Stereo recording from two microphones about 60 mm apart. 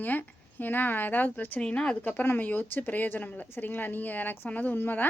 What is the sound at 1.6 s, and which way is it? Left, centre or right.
Speech, centre.